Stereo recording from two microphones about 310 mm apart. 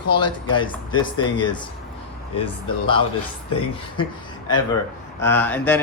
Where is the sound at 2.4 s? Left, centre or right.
Centre.